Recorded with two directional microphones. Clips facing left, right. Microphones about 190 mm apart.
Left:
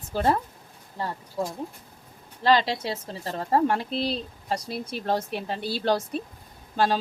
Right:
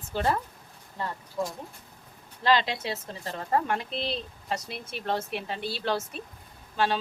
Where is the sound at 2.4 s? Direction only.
35° left (ahead or behind).